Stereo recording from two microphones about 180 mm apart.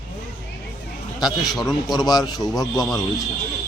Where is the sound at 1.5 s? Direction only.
Centre (ahead or behind).